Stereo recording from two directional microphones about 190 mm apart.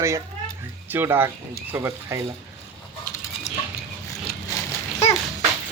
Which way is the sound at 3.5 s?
40° left (ahead or behind).